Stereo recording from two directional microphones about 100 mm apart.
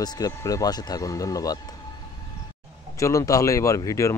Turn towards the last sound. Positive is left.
turn(degrees=30)  # may be behind; listen again after turning